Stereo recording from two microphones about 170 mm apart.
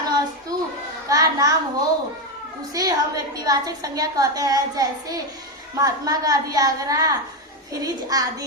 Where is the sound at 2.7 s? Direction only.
20° right (ahead or behind).